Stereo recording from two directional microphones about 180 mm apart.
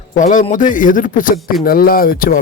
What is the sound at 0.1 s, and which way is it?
A man's voice, 45° left (ahead or behind).